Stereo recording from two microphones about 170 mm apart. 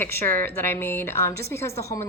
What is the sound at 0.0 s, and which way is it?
A woman's voice, 15° left (ahead or behind).